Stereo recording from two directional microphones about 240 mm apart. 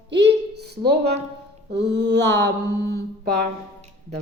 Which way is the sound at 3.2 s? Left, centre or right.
Right.